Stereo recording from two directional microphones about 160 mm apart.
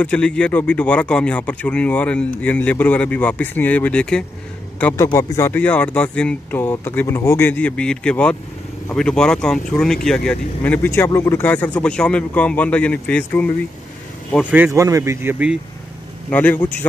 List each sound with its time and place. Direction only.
0.0 s speech: 10° left (ahead or behind)
4.9 s speech: 20° left (ahead or behind)
14.5 s speech: 15° right (ahead or behind)
16.3 s speech: 10° left (ahead or behind)